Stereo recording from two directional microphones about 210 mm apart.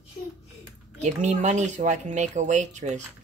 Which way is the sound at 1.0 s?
35° right (ahead or behind).